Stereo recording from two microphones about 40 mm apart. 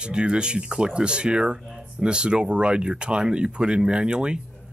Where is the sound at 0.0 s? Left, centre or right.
Right.